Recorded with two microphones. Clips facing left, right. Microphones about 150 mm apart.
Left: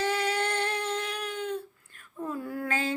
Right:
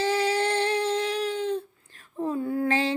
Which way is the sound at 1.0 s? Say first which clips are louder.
Right 7 dB; 30° right (ahead or behind).